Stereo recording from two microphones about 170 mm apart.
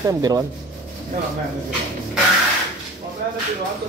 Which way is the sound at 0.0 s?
20° right (ahead or behind).